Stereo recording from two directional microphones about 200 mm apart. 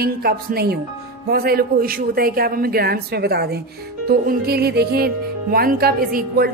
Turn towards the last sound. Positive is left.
turn(degrees=-50)  # may be behind; listen again after turning